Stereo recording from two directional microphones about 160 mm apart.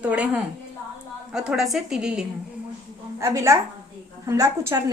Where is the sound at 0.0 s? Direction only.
10° right (ahead or behind).